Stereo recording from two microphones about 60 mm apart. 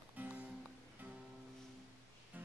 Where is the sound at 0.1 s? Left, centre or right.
Right.